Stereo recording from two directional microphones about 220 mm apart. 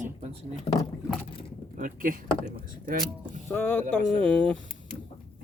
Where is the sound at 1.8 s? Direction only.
40° right (ahead or behind).